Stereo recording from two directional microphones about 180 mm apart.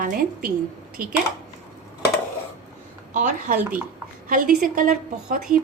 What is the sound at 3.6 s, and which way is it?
Speech, 10° right (ahead or behind).